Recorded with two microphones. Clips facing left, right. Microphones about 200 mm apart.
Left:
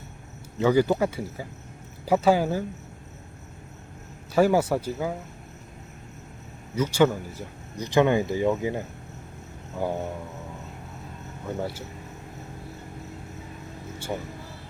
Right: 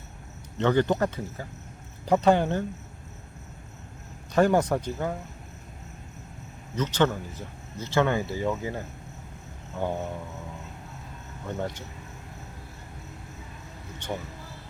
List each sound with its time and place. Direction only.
0.6 s speech: 5° left (ahead or behind)
4.4 s speech: 5° left (ahead or behind)
6.7 s speech: 10° left (ahead or behind)
11.4 s speech: 5° left (ahead or behind)
14.0 s speech: 5° left (ahead or behind)